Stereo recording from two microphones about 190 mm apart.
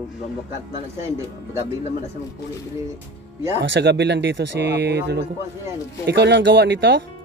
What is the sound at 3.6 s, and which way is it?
Speech, 70° right (ahead or behind).